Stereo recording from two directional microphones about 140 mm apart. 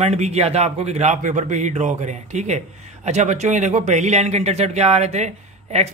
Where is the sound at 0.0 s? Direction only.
50° right (ahead or behind).